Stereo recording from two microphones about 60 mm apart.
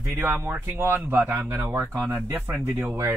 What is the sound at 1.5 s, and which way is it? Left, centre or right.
Speech, right.